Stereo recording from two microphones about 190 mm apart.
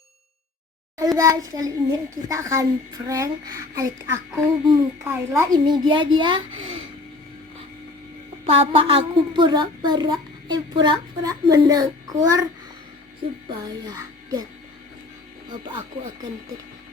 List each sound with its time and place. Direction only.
0.9 s a child's voice: 15° right (ahead or behind)
8.4 s a woman's voice: 30° right (ahead or behind)
13.5 s speech: 20° right (ahead or behind)
15.4 s speech: 25° right (ahead or behind)